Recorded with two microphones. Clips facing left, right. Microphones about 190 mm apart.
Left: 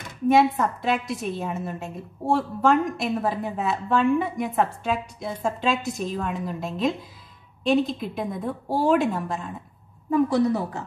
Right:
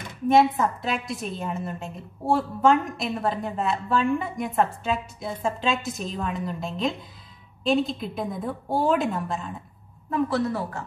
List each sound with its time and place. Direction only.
0.3 s a woman's voice: centre (ahead or behind)
10.0 s a woman's voice: 15° left (ahead or behind)